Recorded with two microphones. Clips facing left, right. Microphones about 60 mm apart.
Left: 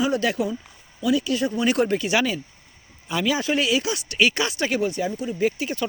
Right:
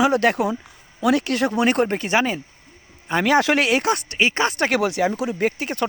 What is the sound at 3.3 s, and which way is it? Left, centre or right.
Speech, right.